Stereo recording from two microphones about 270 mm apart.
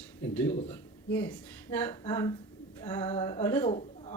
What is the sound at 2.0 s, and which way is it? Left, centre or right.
Speech, centre.